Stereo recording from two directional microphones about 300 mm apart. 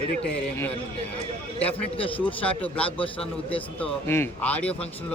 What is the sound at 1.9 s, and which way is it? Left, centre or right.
Speech, centre.